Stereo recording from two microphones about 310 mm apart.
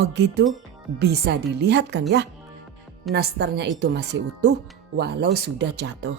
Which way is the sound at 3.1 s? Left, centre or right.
Right.